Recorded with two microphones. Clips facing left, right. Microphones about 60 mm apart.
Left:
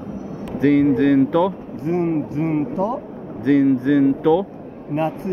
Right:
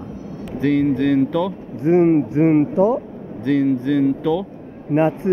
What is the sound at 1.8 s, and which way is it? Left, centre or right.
Speech, right.